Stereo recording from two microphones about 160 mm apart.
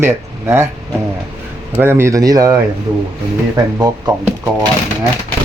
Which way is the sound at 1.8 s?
15° right (ahead or behind).